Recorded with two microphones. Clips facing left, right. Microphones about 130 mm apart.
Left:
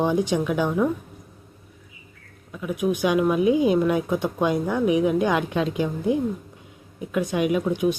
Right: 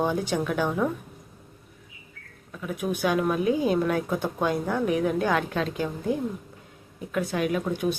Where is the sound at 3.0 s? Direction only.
10° left (ahead or behind).